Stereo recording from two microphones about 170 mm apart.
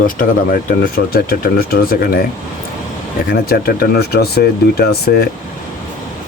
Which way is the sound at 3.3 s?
65° left (ahead or behind).